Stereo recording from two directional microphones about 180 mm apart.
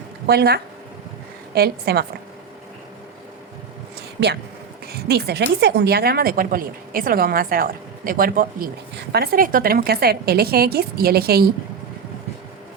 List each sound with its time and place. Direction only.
0.3 s a woman's voice: 60° right (ahead or behind)
4.2 s a woman's voice: 70° right (ahead or behind)